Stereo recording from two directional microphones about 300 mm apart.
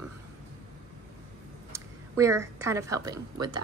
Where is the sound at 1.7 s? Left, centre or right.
Centre.